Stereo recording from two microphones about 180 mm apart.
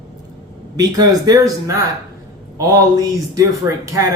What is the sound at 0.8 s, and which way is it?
A man's voice, 20° right (ahead or behind).